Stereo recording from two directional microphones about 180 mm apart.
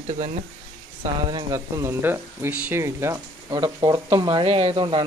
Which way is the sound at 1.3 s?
15° right (ahead or behind).